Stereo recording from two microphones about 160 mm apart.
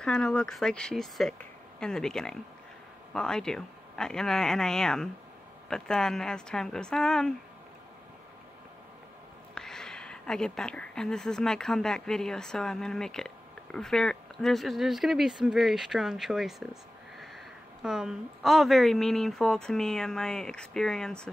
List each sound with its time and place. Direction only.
0.0 s speech: 5° left (ahead or behind)
9.6 s speech: 5° left (ahead or behind)
17.8 s speech: 5° right (ahead or behind)